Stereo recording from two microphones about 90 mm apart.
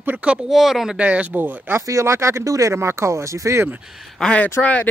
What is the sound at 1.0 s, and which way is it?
Speech, 15° right (ahead or behind).